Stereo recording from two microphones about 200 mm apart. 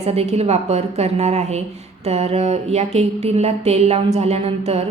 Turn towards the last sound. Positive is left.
turn(degrees=-30)  # may be behind; listen again after turning